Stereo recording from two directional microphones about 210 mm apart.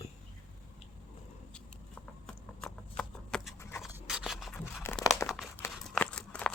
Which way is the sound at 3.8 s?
5° right (ahead or behind).